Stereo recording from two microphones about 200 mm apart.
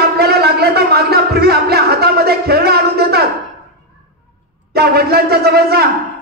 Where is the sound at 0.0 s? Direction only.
55° right (ahead or behind).